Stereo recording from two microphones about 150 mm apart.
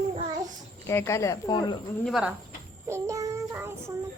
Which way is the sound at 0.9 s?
20° left (ahead or behind).